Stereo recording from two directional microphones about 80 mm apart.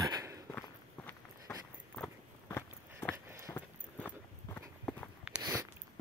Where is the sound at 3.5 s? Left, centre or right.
Left.